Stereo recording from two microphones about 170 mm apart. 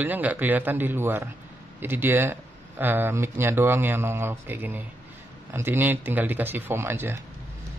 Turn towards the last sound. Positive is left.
turn(degrees=-15)  # may be behind; listen again after turning